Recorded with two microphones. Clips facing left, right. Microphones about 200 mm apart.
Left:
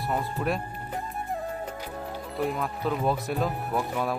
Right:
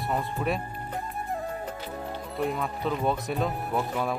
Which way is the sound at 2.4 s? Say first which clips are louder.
Even; centre (ahead or behind).